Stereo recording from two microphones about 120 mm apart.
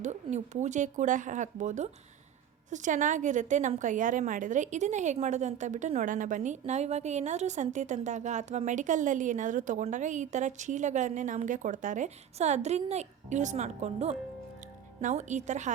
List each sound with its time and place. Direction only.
0.0 s speech: 75° right (ahead or behind)
5.1 s a woman's voice: 70° right (ahead or behind)
15.0 s a woman's voice: 85° right